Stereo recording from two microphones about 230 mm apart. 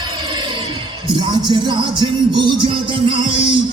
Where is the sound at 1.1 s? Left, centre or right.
Centre.